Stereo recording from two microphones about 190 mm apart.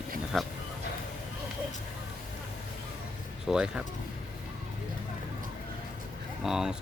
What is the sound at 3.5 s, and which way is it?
Speech, 5° right (ahead or behind).